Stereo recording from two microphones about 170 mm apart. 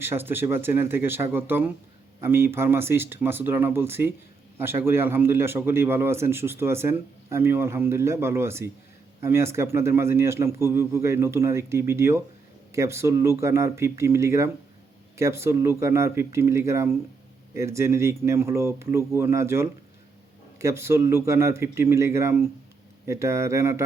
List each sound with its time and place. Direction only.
0.0 s a man's voice: 10° right (ahead or behind)